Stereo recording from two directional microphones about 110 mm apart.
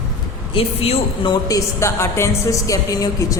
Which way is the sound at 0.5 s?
60° left (ahead or behind).